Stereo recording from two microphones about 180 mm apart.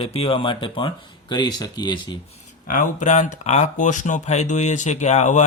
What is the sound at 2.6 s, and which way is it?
Speech, 45° left (ahead or behind).